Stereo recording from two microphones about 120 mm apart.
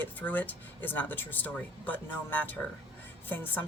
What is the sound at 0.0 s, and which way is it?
A woman's voice, 15° left (ahead or behind).